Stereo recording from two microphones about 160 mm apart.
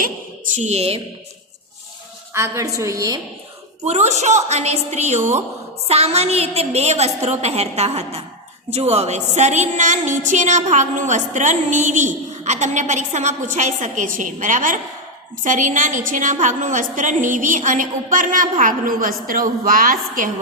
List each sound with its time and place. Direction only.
0.0 s speech: 55° right (ahead or behind)
2.3 s a woman's voice: 20° right (ahead or behind)
3.8 s a woman's voice: 45° right (ahead or behind)